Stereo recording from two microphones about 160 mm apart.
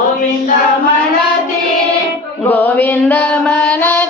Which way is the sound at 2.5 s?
10° left (ahead or behind).